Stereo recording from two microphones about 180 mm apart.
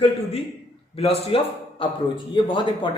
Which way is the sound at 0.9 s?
35° left (ahead or behind).